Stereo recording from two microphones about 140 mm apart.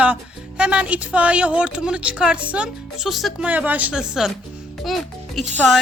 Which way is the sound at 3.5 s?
10° right (ahead or behind).